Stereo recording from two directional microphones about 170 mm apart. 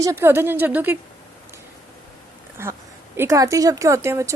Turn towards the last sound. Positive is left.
turn(degrees=-15)  # may be behind; listen again after turning